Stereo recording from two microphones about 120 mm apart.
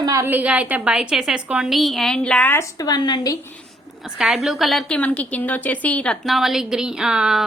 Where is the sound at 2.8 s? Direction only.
35° left (ahead or behind).